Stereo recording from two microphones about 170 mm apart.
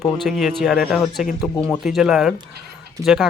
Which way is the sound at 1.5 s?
10° left (ahead or behind).